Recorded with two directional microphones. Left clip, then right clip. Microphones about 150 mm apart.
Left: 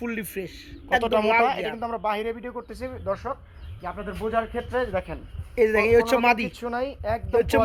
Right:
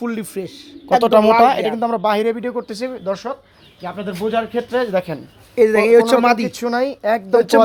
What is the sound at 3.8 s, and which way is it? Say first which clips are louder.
Speech: right 7 dB; 55° right (ahead or behind).